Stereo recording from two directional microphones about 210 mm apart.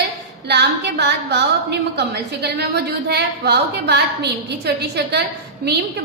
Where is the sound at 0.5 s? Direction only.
55° right (ahead or behind).